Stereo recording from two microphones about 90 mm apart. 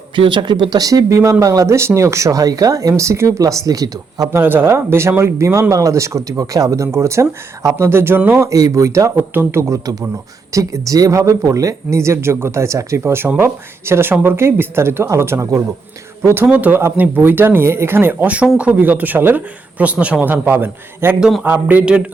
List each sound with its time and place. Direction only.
0.2 s speech: 60° right (ahead or behind); by 4.3 s 45° right (ahead or behind)
4.3 s speech: 25° right (ahead or behind)
8.4 s speech: 40° right (ahead or behind)
16.2 s speech: 25° right (ahead or behind)
21.2 s speech: 5° right (ahead or behind)
21.4 s speech: 20° right (ahead or behind)